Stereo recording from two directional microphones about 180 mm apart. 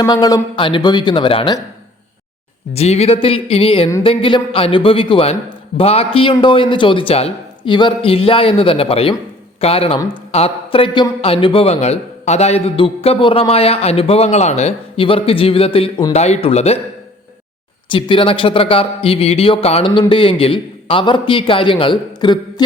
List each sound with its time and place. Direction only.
0.0 s a man's voice: 20° left (ahead or behind)
2.7 s a man's voice: 35° left (ahead or behind)
16.1 s a man's voice: 35° left (ahead or behind)
17.9 s a man's voice: 25° left (ahead or behind)